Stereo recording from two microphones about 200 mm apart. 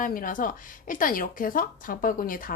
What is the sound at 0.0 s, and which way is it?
A woman's voice, 45° left (ahead or behind).